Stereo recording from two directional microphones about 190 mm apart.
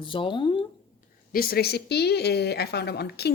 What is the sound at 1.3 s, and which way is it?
A woman's voice, 50° left (ahead or behind).